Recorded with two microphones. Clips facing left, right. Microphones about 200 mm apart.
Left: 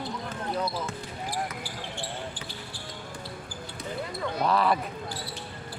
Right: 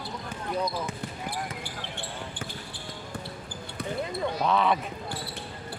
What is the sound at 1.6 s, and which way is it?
Basketball bounce, 55° right (ahead or behind).